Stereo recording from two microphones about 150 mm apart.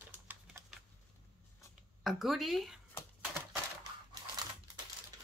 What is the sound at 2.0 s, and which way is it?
Speech, centre (ahead or behind).